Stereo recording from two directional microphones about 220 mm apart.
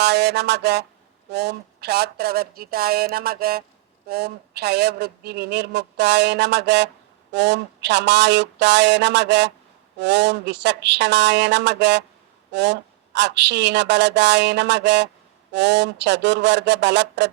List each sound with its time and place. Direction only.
0.0 s speech: 50° right (ahead or behind)